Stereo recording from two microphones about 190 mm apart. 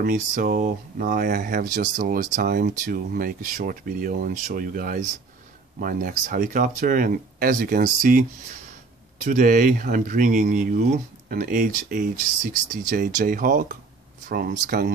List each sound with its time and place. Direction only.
0.0 s speech: 45° right (ahead or behind)